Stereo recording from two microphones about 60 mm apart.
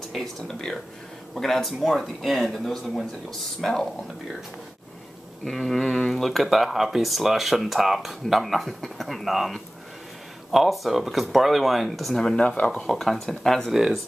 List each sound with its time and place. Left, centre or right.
0.1 s speech: centre
5.4 s speech: centre
12.4 s speech: centre
12.8 s speech: centre